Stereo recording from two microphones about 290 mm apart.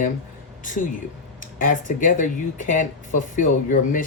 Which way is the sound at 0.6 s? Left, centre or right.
Left.